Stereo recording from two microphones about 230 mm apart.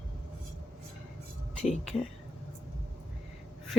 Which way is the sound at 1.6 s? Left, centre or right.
Left.